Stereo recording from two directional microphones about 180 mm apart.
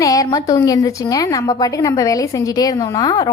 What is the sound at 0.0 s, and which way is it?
Speech, 20° left (ahead or behind).